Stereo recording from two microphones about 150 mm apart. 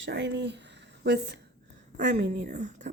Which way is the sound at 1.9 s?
60° right (ahead or behind).